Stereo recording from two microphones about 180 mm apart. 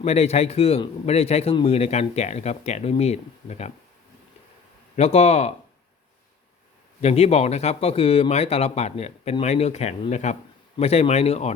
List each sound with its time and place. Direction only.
0.0 s a man's voice: 35° left (ahead or behind)
4.9 s a man's voice: 35° left (ahead or behind)
7.0 s a man's voice: 35° left (ahead or behind)